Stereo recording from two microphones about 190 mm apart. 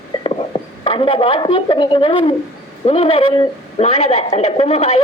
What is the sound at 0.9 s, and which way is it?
A woman's voice, 30° left (ahead or behind).